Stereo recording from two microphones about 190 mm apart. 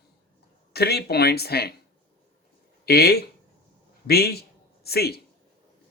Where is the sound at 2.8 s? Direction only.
55° left (ahead or behind).